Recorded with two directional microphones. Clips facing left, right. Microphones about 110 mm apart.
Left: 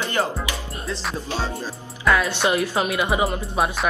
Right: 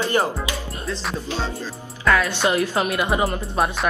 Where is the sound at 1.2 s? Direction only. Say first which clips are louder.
Even; 15° left (ahead or behind).